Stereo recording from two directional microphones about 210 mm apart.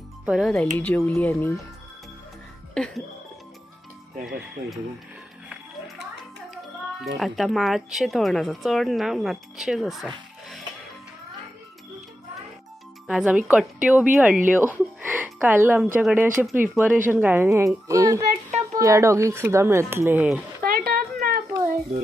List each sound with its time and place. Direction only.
0.2 s speech: 5° right (ahead or behind)
2.7 s speech: 5° left (ahead or behind)
7.2 s speech: centre (ahead or behind)
13.0 s a woman's voice: 5° right (ahead or behind)
20.6 s a sound: 45° right (ahead or behind)